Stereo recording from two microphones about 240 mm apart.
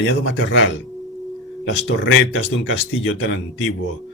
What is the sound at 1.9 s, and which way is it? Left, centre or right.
Speech, left.